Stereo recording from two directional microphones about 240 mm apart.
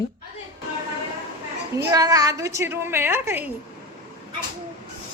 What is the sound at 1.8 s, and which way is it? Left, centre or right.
A woman's voice, centre.